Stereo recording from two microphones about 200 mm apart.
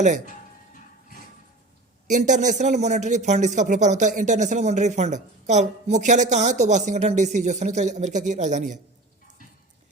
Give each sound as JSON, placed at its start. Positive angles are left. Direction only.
{"t": 2.0, "sound": "speech", "side_deg": -40}